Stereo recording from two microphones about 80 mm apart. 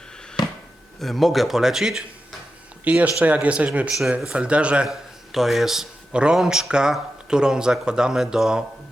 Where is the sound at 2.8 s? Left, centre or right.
Centre.